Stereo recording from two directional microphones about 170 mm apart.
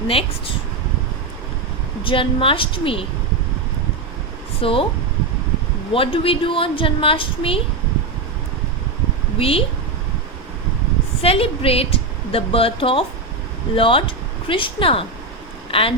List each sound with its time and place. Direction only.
0.1 s a woman's voice: 35° left (ahead or behind)
2.0 s a woman's voice: 30° left (ahead or behind)
4.6 s a woman's voice: 30° left (ahead or behind)
5.9 s a woman's voice: 30° left (ahead or behind)
9.4 s a woman's voice: 35° left (ahead or behind)
11.2 s a woman's voice: 35° left (ahead or behind)